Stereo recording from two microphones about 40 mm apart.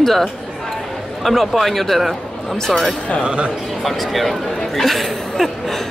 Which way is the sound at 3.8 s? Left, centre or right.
Centre.